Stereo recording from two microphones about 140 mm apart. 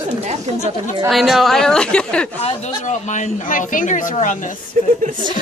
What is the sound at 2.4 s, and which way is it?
Speech, 55° left (ahead or behind).